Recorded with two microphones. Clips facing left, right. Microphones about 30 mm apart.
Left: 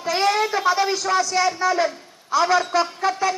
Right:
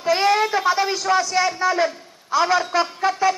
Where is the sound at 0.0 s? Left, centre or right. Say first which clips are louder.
Right 2 dB; centre.